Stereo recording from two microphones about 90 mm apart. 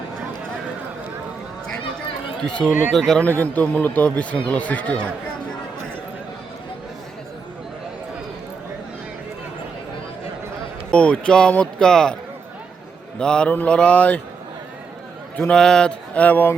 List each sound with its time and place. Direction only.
2.4 s a man's voice: 10° left (ahead or behind)
3.2 s a man's voice: 20° left (ahead or behind)
10.9 s speech: 10° left (ahead or behind)
13.1 s speech: 10° left (ahead or behind)
15.4 s speech: 10° left (ahead or behind)